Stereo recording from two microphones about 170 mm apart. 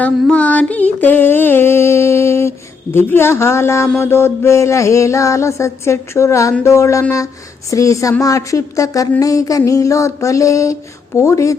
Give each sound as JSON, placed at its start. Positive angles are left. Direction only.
{"t": 0.0, "sound": "music", "side_deg": 5}
{"t": 1.0, "sound": "a sound", "side_deg": 10}
{"t": 2.9, "sound": "mantra", "side_deg": 10}
{"t": 7.7, "sound": "speech", "side_deg": 20}
{"t": 11.2, "sound": "mantra", "side_deg": 15}